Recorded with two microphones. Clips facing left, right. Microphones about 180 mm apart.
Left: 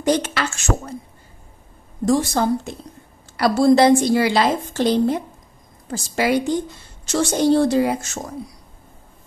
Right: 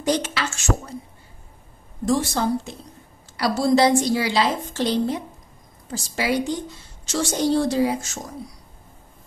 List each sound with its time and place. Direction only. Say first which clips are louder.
0.0 s a woman's voice: left 3 dB; 50° left (ahead or behind)
2.0 s a woman's voice: left 3 dB; 45° left (ahead or behind)